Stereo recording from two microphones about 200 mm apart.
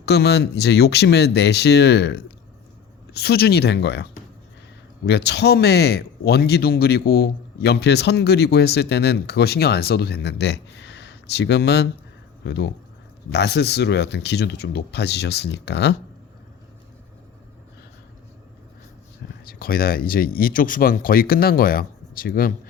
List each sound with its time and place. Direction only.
0.0 s speech: 55° left (ahead or behind)
19.5 s speech: 45° left (ahead or behind)